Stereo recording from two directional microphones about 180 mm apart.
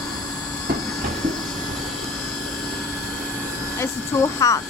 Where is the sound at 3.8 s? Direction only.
20° left (ahead or behind).